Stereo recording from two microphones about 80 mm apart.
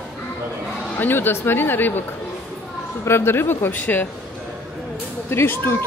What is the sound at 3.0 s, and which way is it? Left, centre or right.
Speech, left.